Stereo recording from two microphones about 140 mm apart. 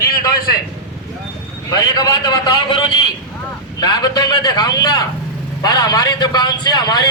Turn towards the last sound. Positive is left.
turn(degrees=30)  # may be behind; listen again after turning